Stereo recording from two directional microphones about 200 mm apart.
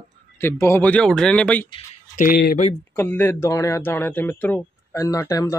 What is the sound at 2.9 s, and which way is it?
Speech, 10° left (ahead or behind).